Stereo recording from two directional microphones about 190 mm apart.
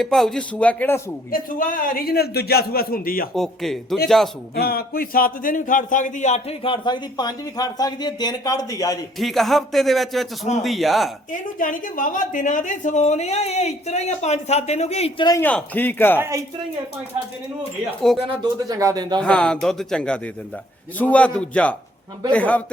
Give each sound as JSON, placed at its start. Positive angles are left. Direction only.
{"t": 0.0, "sound": "speech", "side_deg": 0}
{"t": 1.3, "sound": "a man's voice", "side_deg": 45}
{"t": 3.3, "sound": "speech", "side_deg": 0}
{"t": 4.5, "sound": "a man's voice", "side_deg": 55}
{"t": 9.1, "sound": "speech", "side_deg": 0}
{"t": 11.3, "sound": "a woman's voice", "side_deg": 45}
{"t": 15.3, "sound": "a man's voice", "side_deg": 10}
{"t": 18.2, "sound": "speech", "side_deg": -30}
{"t": 19.2, "sound": "a man's voice", "side_deg": 5}